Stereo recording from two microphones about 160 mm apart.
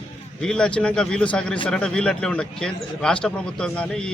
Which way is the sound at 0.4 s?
5° left (ahead or behind).